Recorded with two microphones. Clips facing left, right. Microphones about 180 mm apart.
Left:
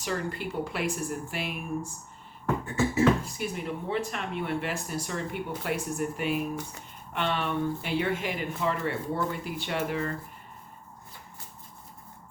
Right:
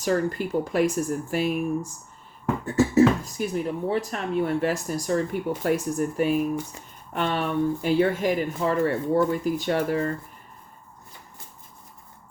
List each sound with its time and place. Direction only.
0.0 s speech: 40° right (ahead or behind)